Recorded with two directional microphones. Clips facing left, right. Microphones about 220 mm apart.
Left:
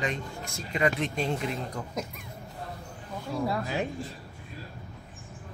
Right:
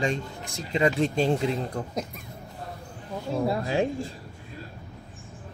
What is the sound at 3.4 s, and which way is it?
Speech, 25° right (ahead or behind).